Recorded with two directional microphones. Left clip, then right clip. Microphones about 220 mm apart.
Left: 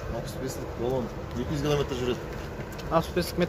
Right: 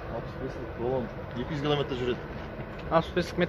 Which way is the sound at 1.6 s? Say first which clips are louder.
Left 1 dB; 20° right (ahead or behind).